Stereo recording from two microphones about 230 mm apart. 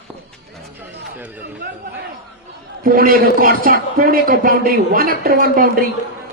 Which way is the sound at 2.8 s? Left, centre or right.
Right.